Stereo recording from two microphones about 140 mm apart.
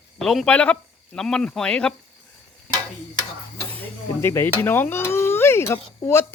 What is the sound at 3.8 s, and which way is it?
Speech, 15° left (ahead or behind).